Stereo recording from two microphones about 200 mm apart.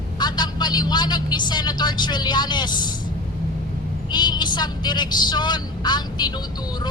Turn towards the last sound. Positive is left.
turn(degrees=20)  # may be behind; listen again after turning